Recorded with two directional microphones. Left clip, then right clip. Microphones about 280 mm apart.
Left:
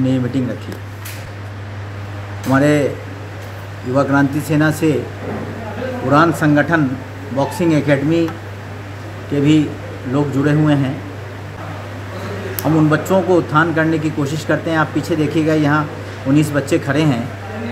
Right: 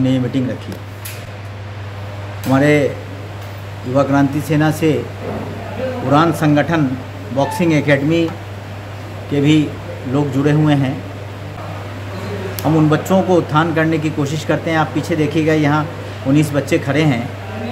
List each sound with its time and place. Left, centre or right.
0.0 s speech: centre
2.5 s speech: centre
3.9 s speech: centre
6.0 s speech: centre
9.3 s speech: centre
12.5 s speech: centre